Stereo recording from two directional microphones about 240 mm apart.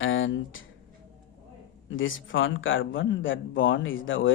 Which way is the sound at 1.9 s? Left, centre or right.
Left.